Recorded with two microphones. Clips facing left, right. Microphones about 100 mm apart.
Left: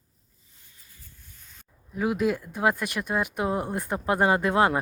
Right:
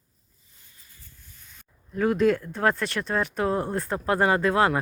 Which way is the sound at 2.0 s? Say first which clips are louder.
Right 4 dB; 10° left (ahead or behind).